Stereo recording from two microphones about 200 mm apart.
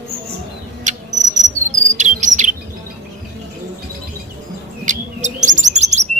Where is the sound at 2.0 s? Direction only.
40° right (ahead or behind).